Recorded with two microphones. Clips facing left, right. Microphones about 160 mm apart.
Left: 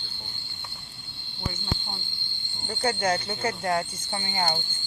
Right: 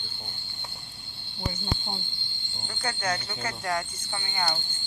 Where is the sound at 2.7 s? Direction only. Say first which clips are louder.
Left 6 dB; 30° left (ahead or behind).